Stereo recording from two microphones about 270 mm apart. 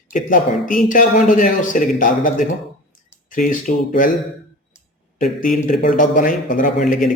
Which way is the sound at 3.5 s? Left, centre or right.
Left.